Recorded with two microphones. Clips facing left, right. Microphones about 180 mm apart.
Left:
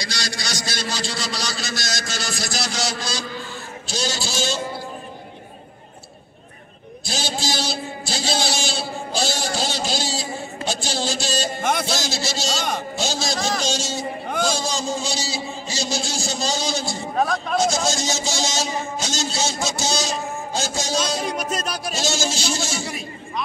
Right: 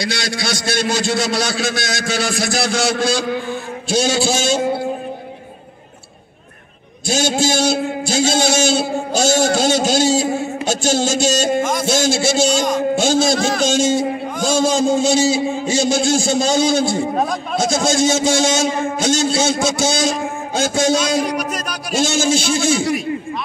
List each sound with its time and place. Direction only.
0.0 s a man's voice: 55° right (ahead or behind)
7.1 s a man's voice: 50° right (ahead or behind)
10.2 s mantra: 75° right (ahead or behind)
10.7 s a man's voice: 45° right (ahead or behind)
17.1 s a man's voice: 20° right (ahead or behind)
17.7 s a man's voice: 50° right (ahead or behind)
21.5 s music: 25° left (ahead or behind)
21.9 s a man's voice: 55° right (ahead or behind)